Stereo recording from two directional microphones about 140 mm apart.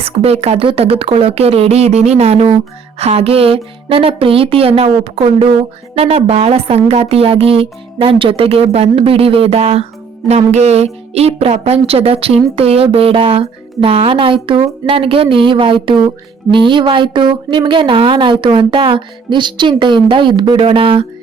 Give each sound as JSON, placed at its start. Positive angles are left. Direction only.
{"t": 0.0, "sound": "speech", "side_deg": -45}